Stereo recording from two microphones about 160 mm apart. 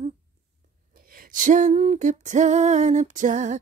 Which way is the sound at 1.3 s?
55° right (ahead or behind).